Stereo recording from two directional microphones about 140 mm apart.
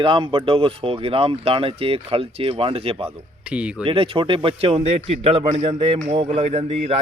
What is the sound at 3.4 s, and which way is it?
Speech, 5° right (ahead or behind).